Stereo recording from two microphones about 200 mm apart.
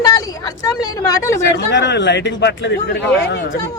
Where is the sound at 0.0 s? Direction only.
20° left (ahead or behind).